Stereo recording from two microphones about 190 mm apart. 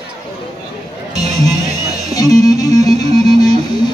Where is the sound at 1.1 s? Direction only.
20° left (ahead or behind).